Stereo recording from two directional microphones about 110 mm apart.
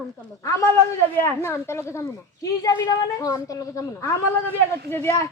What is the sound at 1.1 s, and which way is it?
A woman's voice, 25° left (ahead or behind).